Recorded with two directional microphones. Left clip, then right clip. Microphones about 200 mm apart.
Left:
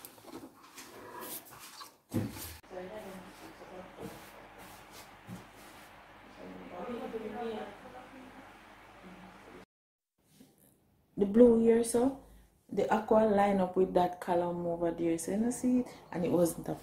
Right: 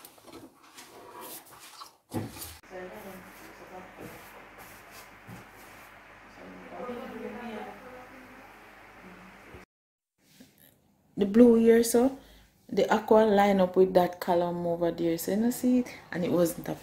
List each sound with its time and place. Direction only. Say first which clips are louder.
11.1 s speech: right 3 dB; 20° right (ahead or behind)